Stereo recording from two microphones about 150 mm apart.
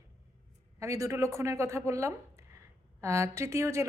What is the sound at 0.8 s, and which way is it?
A woman's voice, 20° right (ahead or behind).